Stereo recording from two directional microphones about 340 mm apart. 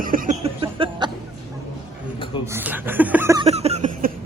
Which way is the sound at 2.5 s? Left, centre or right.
Centre.